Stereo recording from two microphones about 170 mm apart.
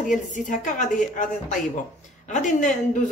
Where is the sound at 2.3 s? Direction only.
45° left (ahead or behind).